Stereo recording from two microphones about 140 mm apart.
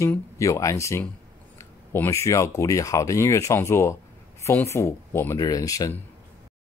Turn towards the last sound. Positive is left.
turn(degrees=25)  # may be behind; listen again after turning